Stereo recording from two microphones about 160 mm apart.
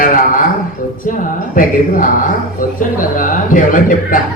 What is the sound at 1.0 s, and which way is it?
Speech, 55° left (ahead or behind).